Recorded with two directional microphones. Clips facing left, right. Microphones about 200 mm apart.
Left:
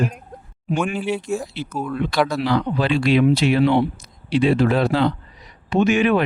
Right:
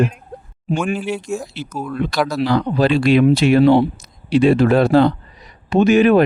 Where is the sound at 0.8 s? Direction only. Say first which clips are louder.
Right 1 dB; centre (ahead or behind).